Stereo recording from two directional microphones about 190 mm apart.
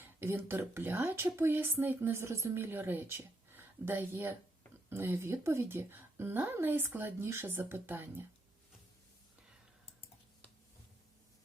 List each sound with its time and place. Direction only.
0.0 s speech: 10° right (ahead or behind)